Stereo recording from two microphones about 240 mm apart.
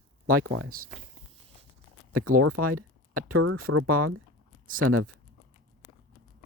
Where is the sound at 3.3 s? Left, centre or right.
Right.